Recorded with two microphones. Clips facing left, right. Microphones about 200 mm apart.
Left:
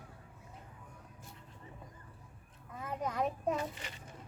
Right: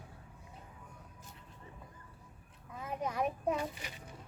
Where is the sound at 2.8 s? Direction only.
15° right (ahead or behind).